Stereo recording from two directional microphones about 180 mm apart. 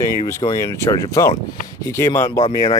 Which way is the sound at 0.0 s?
20° left (ahead or behind).